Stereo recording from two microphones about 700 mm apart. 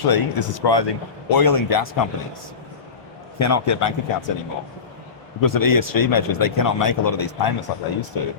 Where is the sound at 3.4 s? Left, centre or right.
Left.